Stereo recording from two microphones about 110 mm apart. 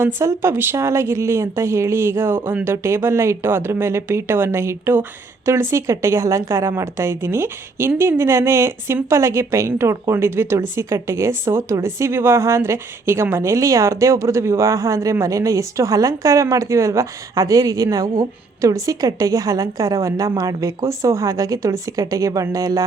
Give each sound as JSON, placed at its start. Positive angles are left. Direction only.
{"t": 0.0, "sound": "speech", "side_deg": -25}